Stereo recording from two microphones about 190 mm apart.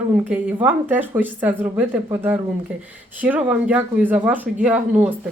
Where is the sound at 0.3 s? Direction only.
10° right (ahead or behind).